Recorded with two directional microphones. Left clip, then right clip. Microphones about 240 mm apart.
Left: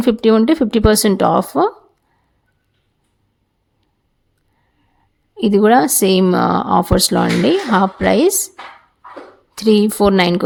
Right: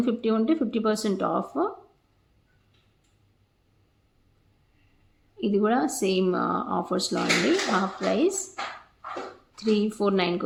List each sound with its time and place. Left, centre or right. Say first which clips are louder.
0.0 s speech: left 13 dB; left
5.4 s speech: left 13 dB; left
9.6 s speech: left 12 dB; left